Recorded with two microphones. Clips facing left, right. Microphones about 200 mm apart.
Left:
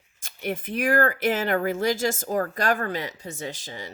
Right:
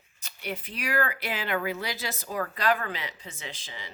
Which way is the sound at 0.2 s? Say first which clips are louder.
Left 6 dB; 50° left (ahead or behind).